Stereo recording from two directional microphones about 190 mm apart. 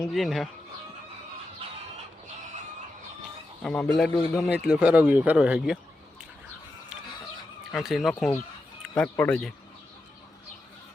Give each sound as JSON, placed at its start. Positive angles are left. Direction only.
{"t": 0.1, "sound": "speech", "side_deg": 0}
{"t": 1.6, "sound": "chicken", "side_deg": -30}
{"t": 3.6, "sound": "speech", "side_deg": 0}
{"t": 7.7, "sound": "speech", "side_deg": 0}